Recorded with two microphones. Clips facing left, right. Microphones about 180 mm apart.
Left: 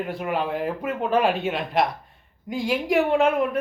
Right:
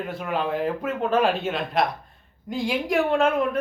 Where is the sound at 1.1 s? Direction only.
15° left (ahead or behind).